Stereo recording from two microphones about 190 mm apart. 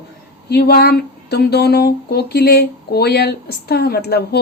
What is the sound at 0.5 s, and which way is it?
Speech, 60° left (ahead or behind).